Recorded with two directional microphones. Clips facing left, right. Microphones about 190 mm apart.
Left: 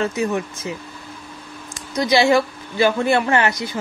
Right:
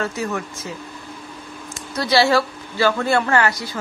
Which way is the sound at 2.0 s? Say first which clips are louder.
Left 1 dB; 15° left (ahead or behind).